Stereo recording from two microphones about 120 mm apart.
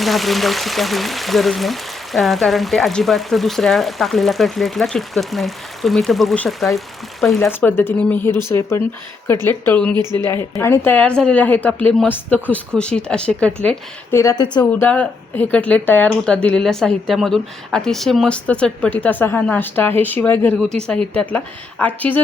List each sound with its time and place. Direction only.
0.0 s speech: centre (ahead or behind)
7.4 s speech: 15° left (ahead or behind)
9.9 s a woman's voice: 35° right (ahead or behind)
10.5 s speech: 20° left (ahead or behind)
14.1 s speech: 25° left (ahead or behind)
14.3 s a woman's voice: 40° left (ahead or behind)
14.6 s speech: 15° left (ahead or behind)
20.6 s speech: 5° left (ahead or behind)